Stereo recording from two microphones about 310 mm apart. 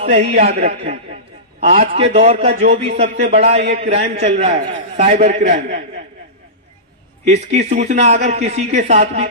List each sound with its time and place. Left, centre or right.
0.1 s a man's voice: centre
7.2 s a man's voice: right